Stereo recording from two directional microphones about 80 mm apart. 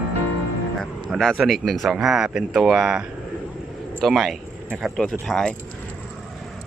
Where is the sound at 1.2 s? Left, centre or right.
Centre.